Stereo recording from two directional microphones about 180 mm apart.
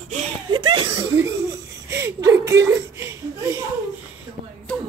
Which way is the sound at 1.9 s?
15° right (ahead or behind).